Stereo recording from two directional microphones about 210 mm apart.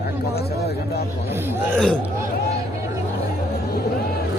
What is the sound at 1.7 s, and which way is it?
Speech, 5° left (ahead or behind).